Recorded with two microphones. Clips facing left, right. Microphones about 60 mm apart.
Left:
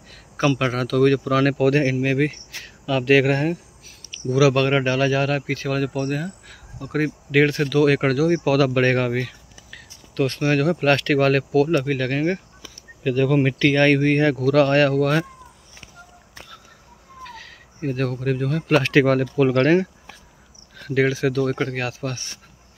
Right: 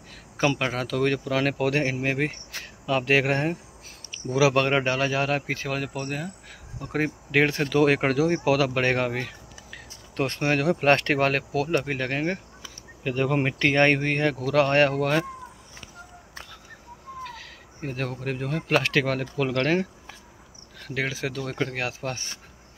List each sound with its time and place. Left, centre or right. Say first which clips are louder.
0.1 s speech: left 3 dB; centre
10.1 s speech: left 4 dB; right
10.8 s speech: left 3 dB; right
13.9 s speech: left 6 dB; centre
17.3 s speech: left 2 dB; centre
18.9 s speech: left 8 dB; centre
20.8 s speech: left 9 dB; centre